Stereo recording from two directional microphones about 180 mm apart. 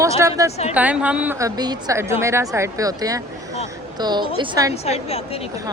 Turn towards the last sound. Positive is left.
turn(degrees=35)  # may be behind; listen again after turning